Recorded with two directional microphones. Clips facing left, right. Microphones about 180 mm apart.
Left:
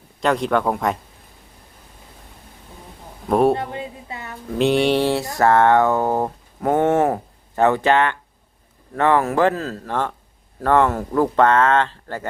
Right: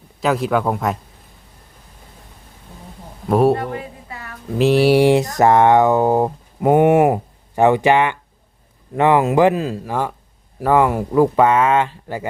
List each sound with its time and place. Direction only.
0.2 s speech: 5° right (ahead or behind)
3.2 s speech: centre (ahead or behind)
3.5 s a sound: 25° left (ahead or behind)
4.5 s speech: 5° right (ahead or behind)